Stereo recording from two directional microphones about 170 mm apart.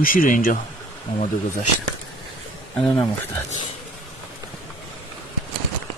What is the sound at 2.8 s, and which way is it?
Speech, 5° left (ahead or behind).